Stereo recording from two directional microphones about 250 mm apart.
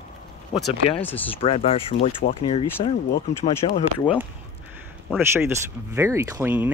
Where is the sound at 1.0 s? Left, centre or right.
Centre.